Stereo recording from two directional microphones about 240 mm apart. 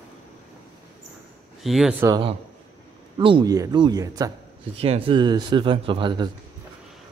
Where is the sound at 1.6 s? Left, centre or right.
Centre.